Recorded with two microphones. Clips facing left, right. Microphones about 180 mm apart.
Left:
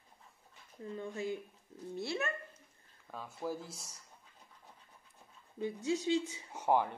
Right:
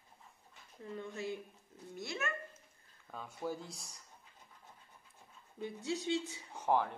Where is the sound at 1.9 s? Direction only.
30° left (ahead or behind).